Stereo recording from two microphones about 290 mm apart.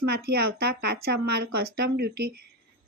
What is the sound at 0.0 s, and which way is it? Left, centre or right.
Speech, right.